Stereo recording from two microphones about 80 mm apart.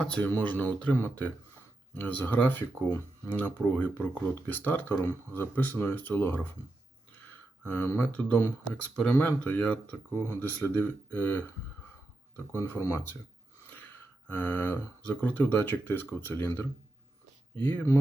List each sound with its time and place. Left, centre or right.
0.0 s speech: centre
7.2 s a sound: left
8.0 s speech: centre
8.4 s speech: left
8.8 s speech: centre
12.5 s speech: left
14.3 s speech: left